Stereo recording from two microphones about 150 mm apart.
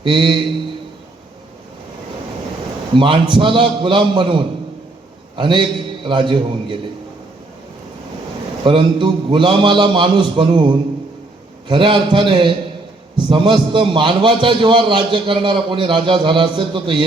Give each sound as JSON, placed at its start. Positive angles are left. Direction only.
{"t": 0.0, "sound": "a man's voice", "side_deg": -35}
{"t": 2.9, "sound": "a man's voice", "side_deg": -35}
{"t": 8.6, "sound": "a man's voice", "side_deg": -30}